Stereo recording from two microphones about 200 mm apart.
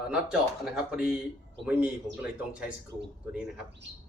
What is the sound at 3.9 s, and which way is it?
Bird, 65° right (ahead or behind).